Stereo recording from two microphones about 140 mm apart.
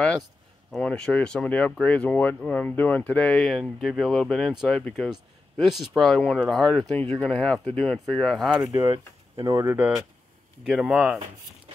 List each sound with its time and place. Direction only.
0.7 s speech: 5° left (ahead or behind)
8.6 s speech: 20° right (ahead or behind); by 11.1 s 5° right (ahead or behind)